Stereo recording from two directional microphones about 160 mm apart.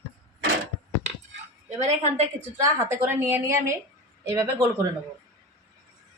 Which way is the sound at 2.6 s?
15° right (ahead or behind).